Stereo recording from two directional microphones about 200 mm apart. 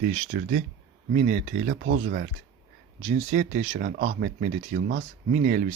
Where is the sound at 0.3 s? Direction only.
45° right (ahead or behind).